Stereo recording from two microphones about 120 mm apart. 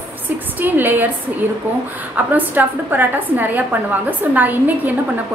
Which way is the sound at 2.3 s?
15° right (ahead or behind).